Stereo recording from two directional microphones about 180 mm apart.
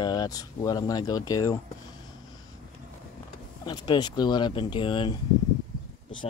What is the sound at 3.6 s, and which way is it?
Speech, 25° left (ahead or behind).